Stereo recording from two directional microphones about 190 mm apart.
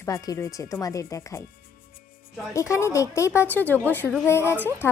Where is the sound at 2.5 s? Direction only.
15° left (ahead or behind).